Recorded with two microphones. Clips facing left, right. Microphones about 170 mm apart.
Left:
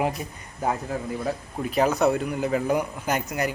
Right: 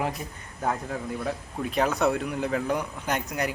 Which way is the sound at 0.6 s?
5° left (ahead or behind).